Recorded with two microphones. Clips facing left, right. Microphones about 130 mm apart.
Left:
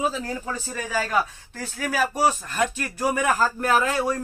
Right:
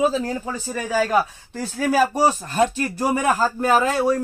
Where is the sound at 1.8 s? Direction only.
35° right (ahead or behind).